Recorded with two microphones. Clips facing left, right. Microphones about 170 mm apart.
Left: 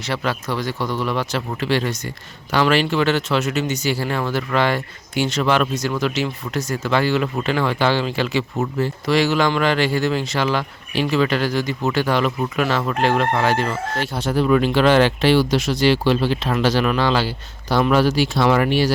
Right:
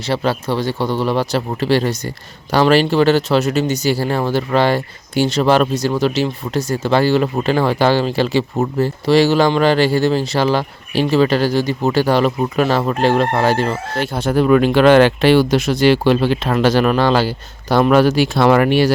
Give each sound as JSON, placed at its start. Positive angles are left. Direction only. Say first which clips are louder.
{"t": 0.0, "sound": "speech", "louder": "right 5 dB", "side_deg": -30}
{"t": 14.0, "sound": "speech", "louder": "right 5 dB", "side_deg": -55}